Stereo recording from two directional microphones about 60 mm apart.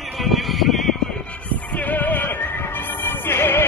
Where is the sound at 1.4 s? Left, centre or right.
Left.